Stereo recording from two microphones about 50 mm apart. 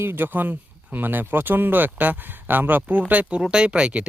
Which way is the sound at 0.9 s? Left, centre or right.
Right.